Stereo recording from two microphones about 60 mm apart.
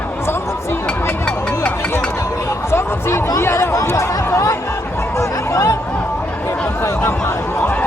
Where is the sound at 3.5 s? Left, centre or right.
Left.